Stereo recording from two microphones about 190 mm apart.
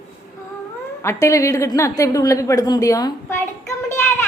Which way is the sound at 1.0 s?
15° left (ahead or behind).